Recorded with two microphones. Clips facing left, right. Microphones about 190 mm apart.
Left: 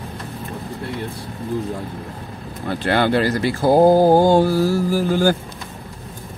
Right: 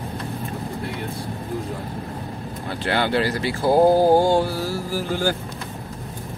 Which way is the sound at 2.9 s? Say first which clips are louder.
Left 4 dB; 45° left (ahead or behind).